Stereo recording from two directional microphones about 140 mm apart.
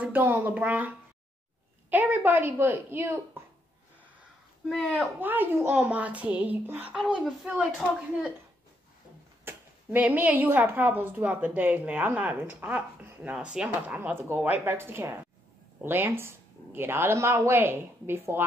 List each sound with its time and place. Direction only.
0.0 s a woman's voice: 10° right (ahead or behind)
4.6 s speech: centre (ahead or behind)
5.2 s a woman's voice: 15° right (ahead or behind)
9.4 s a woman's voice: 15° right (ahead or behind)